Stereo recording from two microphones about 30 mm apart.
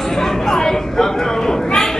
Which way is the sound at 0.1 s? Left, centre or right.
Centre.